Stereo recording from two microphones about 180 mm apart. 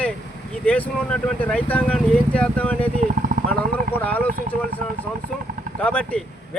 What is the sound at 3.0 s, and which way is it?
Speech, 45° right (ahead or behind).